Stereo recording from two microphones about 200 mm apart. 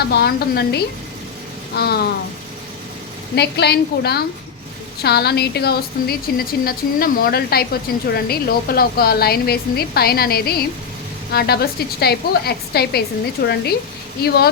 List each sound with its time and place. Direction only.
0.1 s a woman's voice: 50° left (ahead or behind)
3.3 s a woman's voice: 55° left (ahead or behind)